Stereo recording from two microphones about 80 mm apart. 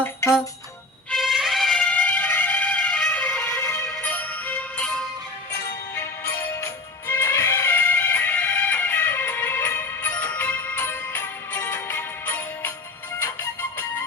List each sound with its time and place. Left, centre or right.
0.0 s music: left
1.1 s music: centre
1.8 s music: centre
7.1 s music: left